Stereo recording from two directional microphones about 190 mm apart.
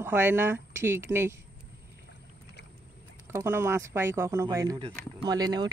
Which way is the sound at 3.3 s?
10° right (ahead or behind).